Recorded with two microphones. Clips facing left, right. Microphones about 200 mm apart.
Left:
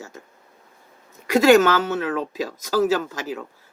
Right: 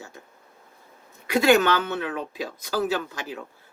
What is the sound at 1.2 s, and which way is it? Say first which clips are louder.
Speech: left 4 dB; 40° left (ahead or behind).